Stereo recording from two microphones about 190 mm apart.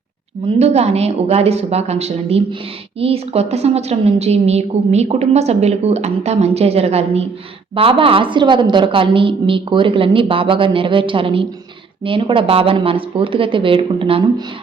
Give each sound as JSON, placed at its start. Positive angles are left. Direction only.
{"t": 0.4, "sound": "a woman's voice", "side_deg": -35}